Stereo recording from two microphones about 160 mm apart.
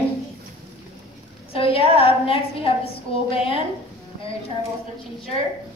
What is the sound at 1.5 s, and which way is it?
A woman's voice, 35° left (ahead or behind).